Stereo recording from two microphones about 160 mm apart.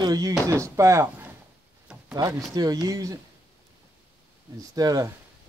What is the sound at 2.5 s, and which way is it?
Speech, 25° right (ahead or behind).